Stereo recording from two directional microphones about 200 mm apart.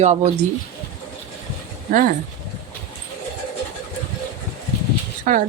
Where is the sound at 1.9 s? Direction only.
40° right (ahead or behind).